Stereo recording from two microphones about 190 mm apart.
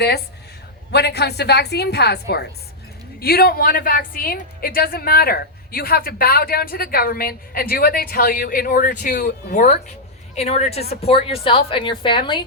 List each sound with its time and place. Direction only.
0.9 s a woman's voice: 60° left (ahead or behind); by 9.7 s 45° left (ahead or behind)
10.3 s a woman's voice: 35° left (ahead or behind)